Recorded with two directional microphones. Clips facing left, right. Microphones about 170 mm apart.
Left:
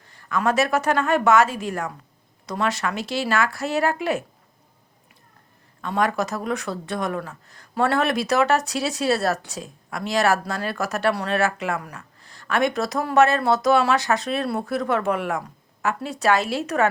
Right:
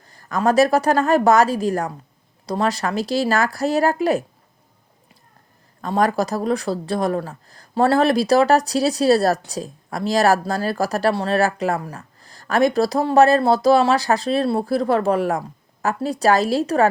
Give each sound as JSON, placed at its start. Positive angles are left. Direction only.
{"t": 0.0, "sound": "speech", "side_deg": -40}
{"t": 5.8, "sound": "speech", "side_deg": -35}